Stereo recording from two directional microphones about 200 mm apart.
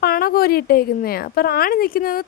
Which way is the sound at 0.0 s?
50° left (ahead or behind).